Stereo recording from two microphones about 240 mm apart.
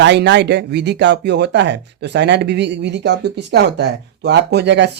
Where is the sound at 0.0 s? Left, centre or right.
Right.